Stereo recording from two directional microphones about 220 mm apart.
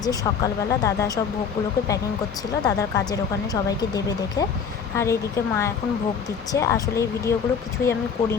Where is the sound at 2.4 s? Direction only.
15° left (ahead or behind).